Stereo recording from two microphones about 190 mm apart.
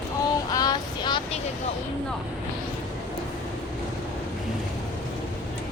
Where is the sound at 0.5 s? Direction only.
20° left (ahead or behind).